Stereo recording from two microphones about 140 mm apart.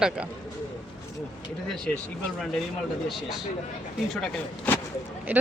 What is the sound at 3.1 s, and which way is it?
Speech, centre (ahead or behind).